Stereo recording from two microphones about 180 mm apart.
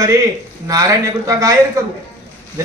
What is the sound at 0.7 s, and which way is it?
Speech, 20° right (ahead or behind).